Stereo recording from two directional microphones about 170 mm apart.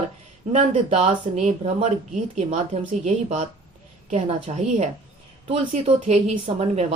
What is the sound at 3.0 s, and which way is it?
Speech, 40° right (ahead or behind).